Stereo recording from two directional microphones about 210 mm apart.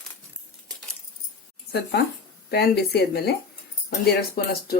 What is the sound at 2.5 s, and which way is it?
Speech, 50° left (ahead or behind).